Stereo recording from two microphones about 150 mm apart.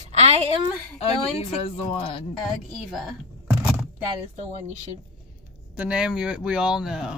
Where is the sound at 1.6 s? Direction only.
40° left (ahead or behind).